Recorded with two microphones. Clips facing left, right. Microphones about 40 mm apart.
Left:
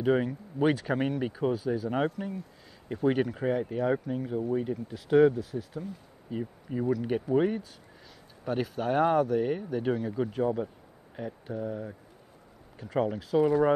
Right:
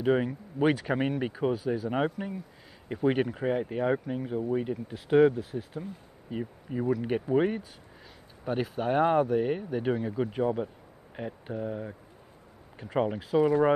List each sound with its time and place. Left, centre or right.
0.0 s speech: centre
5.4 s speech: right
6.3 s speech: centre